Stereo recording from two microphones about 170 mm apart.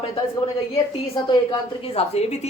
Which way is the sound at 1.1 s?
30° left (ahead or behind).